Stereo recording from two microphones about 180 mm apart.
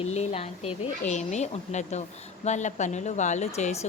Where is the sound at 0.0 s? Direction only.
35° left (ahead or behind).